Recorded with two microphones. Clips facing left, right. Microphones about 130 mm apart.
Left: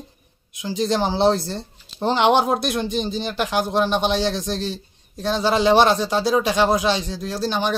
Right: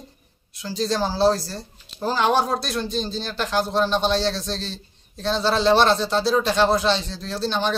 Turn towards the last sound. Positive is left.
turn(degrees=10)  # may be behind; listen again after turning